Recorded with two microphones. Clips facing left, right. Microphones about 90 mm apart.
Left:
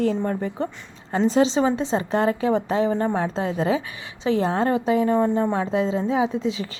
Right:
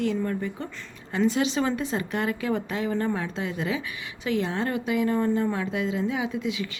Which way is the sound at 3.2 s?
35° left (ahead or behind).